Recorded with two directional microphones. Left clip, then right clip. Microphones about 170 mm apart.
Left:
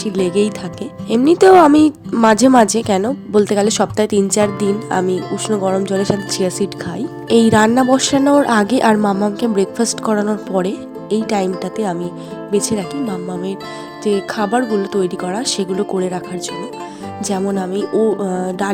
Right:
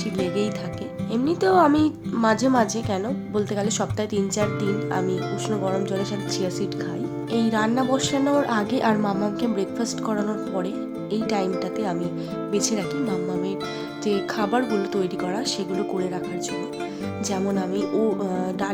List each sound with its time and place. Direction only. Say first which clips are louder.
0.0 s speech: left 9 dB; 40° left (ahead or behind)
17.4 s speech: left 5 dB; 30° left (ahead or behind)